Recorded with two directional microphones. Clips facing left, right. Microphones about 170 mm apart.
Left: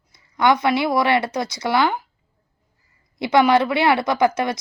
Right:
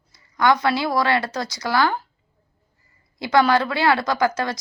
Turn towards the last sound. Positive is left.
turn(degrees=20)  # may be behind; listen again after turning